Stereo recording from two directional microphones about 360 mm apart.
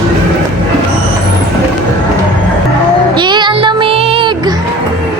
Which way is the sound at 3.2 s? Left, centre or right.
Centre.